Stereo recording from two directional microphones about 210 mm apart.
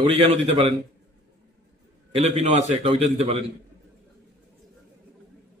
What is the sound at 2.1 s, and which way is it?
A man's voice, 30° right (ahead or behind).